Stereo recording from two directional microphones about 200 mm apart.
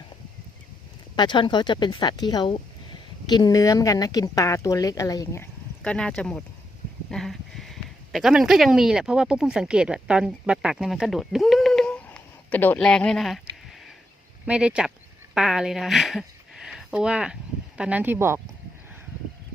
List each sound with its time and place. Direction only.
1.1 s speech: 20° left (ahead or behind); by 18.3 s 10° right (ahead or behind)